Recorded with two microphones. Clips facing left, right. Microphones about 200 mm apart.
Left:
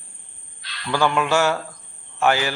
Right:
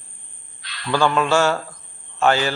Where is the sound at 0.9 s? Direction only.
15° left (ahead or behind).